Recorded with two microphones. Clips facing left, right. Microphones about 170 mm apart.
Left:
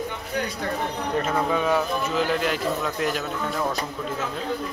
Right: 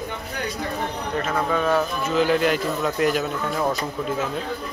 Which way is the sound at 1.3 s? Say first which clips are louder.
Right 2 dB; 10° left (ahead or behind).